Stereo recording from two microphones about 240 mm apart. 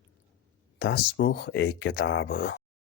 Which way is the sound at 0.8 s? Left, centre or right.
Left.